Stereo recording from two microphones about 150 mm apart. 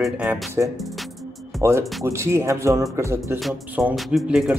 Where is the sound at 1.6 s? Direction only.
20° right (ahead or behind).